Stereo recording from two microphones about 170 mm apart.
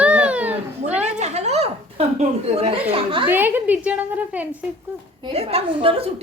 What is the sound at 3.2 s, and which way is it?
A child's voice, 10° right (ahead or behind).